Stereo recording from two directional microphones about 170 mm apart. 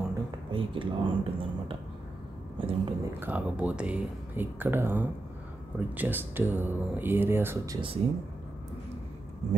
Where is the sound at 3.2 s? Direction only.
10° right (ahead or behind).